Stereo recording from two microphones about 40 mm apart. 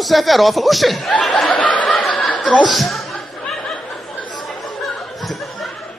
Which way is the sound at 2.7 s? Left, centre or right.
Centre.